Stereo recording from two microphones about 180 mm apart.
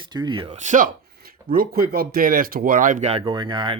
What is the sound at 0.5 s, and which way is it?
Speech, 45° right (ahead or behind).